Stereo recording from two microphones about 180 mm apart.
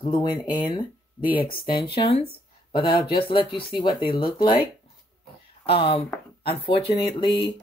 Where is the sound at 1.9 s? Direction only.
30° left (ahead or behind).